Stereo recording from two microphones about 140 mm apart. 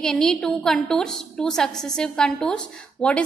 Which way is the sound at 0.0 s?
5° left (ahead or behind).